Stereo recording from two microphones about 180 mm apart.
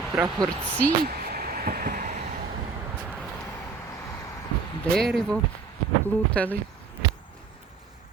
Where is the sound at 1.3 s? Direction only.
55° right (ahead or behind).